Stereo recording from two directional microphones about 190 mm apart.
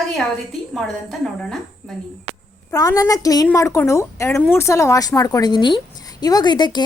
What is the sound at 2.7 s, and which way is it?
A woman's voice, 20° left (ahead or behind).